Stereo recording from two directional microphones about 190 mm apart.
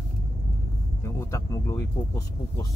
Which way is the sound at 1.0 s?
15° left (ahead or behind).